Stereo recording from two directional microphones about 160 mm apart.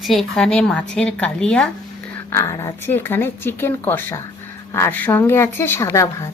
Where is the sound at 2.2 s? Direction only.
15° left (ahead or behind).